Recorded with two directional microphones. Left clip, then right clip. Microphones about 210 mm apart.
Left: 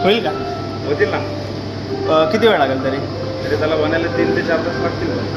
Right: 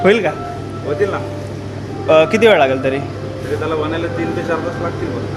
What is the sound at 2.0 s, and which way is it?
Speech, 50° right (ahead or behind).